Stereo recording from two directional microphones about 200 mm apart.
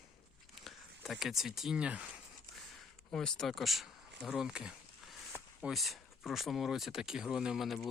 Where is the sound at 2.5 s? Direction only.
Centre (ahead or behind).